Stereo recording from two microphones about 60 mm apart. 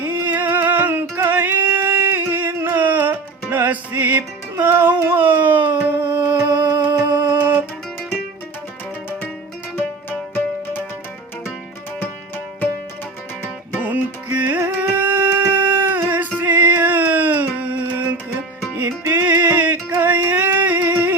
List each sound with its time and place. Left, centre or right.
0.0 s music: right
0.9 s music: right
1.3 s singing: right
2.7 s music: right
5.7 s humming: right
7.3 s music: right
9.7 s music: left
13.4 s music: right
16.4 s a sound: right
19.1 s music: right